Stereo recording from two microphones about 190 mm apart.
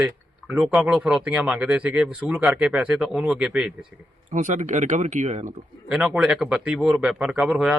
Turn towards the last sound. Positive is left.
turn(degrees=-5)  # may be behind; listen again after turning